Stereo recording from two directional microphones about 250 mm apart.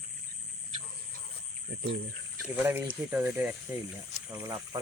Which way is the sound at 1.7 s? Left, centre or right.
Right.